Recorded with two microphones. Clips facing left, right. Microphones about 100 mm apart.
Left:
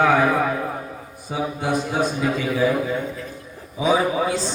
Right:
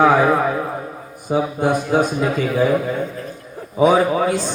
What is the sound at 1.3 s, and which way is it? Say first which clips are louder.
Speech: right 5 dB; 50° right (ahead or behind).